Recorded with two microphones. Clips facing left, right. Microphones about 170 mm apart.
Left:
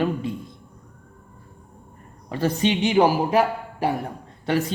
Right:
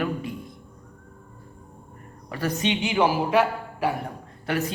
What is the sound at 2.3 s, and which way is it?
A man's voice, 25° left (ahead or behind).